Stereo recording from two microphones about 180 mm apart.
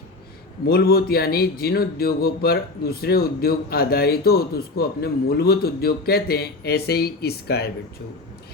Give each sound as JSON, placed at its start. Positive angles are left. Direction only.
{"t": 0.6, "sound": "speech", "side_deg": 60}